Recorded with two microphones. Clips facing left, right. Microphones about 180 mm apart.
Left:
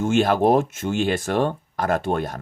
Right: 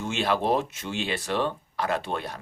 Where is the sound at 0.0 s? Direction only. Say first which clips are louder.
Left 8 dB; 45° left (ahead or behind).